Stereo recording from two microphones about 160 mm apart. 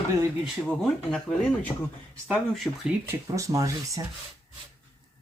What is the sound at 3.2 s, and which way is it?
Speech, 20° right (ahead or behind).